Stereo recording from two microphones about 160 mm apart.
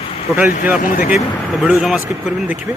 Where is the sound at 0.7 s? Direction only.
55° left (ahead or behind).